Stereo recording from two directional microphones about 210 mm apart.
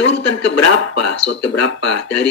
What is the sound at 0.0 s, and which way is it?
Speech, 60° left (ahead or behind).